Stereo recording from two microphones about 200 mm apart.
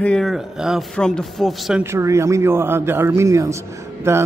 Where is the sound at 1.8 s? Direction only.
15° right (ahead or behind).